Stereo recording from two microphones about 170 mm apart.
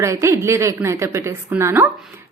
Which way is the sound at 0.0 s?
15° right (ahead or behind).